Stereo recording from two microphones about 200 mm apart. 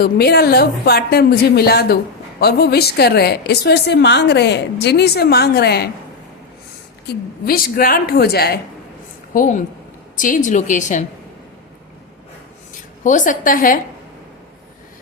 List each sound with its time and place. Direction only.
0.0 s a woman's voice: 50° left (ahead or behind)
7.4 s a woman's voice: 45° left (ahead or behind)
9.3 s a woman's voice: 40° left (ahead or behind)
13.0 s a woman's voice: 40° left (ahead or behind)